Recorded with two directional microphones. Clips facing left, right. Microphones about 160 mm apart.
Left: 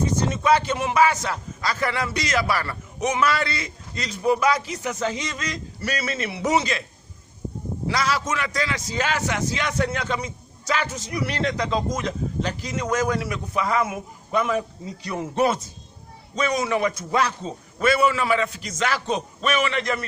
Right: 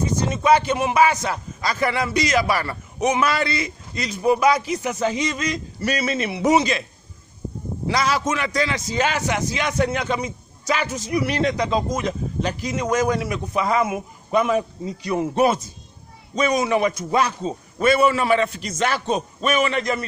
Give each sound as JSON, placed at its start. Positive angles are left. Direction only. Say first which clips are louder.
{"t": 0.0, "sound": "a man's voice", "louder": "right 1 dB", "side_deg": -15}
{"t": 7.9, "sound": "a man's voice", "louder": "right 3 dB", "side_deg": -20}
{"t": 18.2, "sound": "a man's voice", "louder": "right 3 dB", "side_deg": -40}
{"t": 19.1, "sound": "a man's voice", "louder": "right 3 dB", "side_deg": -25}